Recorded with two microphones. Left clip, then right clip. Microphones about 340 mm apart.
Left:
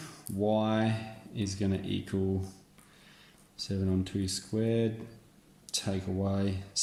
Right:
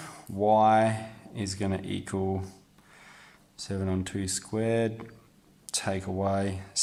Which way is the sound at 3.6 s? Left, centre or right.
Right.